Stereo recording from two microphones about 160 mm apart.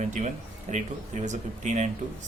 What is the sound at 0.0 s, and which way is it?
Speech, 50° right (ahead or behind).